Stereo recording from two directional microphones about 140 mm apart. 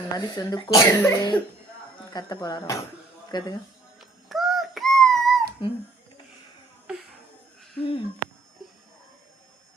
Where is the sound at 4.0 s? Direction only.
Centre (ahead or behind).